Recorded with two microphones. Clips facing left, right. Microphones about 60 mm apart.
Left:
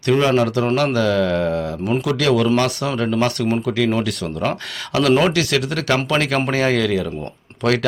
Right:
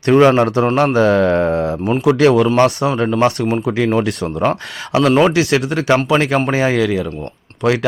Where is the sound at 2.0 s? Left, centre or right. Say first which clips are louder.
Right 7 dB; right.